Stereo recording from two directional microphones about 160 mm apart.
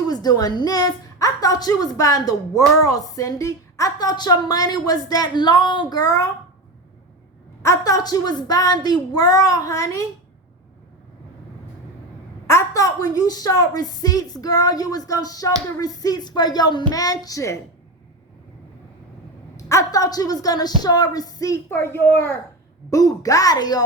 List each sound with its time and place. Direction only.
0.1 s a woman's voice: 25° left (ahead or behind)
7.6 s a woman's voice: 20° left (ahead or behind)
12.5 s a woman's voice: 20° left (ahead or behind)
19.5 s a woman's voice: 20° left (ahead or behind)